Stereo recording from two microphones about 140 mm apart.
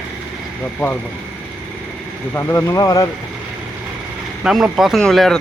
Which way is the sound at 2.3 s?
20° left (ahead or behind).